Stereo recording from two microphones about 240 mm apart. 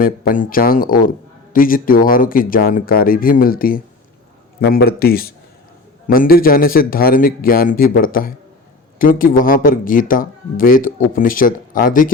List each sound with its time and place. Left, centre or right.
0.0 s speech: left